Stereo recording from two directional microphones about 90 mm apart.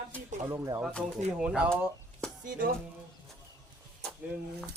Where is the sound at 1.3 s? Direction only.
10° right (ahead or behind).